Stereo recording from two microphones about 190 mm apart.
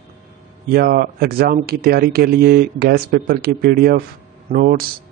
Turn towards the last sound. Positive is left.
turn(degrees=-50)  # may be behind; listen again after turning